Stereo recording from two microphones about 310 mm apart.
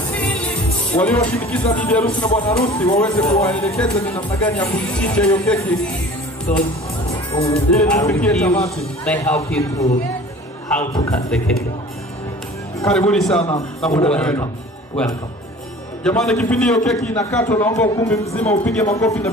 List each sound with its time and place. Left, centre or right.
0.1 s music: centre
0.9 s a man's voice: centre
2.8 s a man's voice: centre
7.3 s a man's voice: centre
12.8 s a man's voice: centre
13.4 s a man's voice: centre
13.7 s a man's voice: centre
16.0 s a man's voice: centre